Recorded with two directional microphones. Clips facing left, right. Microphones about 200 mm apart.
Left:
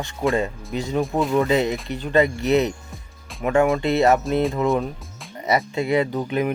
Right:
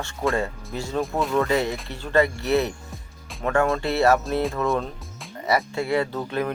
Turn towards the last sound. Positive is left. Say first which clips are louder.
# left 3 dB
turn(degrees=15)  # may be behind; listen again after turning